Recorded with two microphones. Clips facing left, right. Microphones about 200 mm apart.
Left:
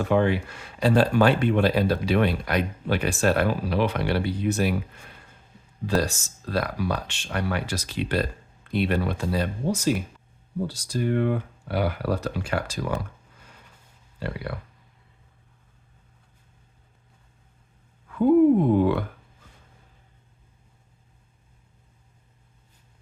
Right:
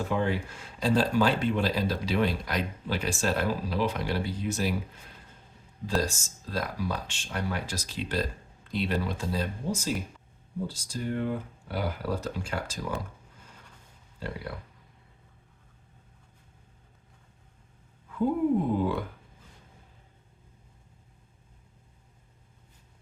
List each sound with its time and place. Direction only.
0.0 s speech: 70° left (ahead or behind)
6.0 s speech: 70° left (ahead or behind)
14.2 s speech: 70° left (ahead or behind)
18.1 s speech: 70° left (ahead or behind)